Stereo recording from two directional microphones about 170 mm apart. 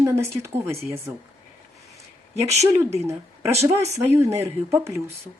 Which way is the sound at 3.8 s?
15° right (ahead or behind).